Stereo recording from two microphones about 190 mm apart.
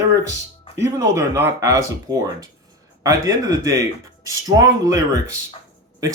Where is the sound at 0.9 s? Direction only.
15° right (ahead or behind).